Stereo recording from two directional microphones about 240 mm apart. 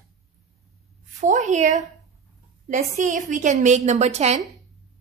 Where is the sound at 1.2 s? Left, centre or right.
Right.